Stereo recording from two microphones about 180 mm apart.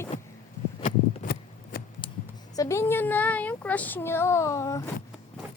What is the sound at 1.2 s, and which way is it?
Shuffling cards, 60° left (ahead or behind).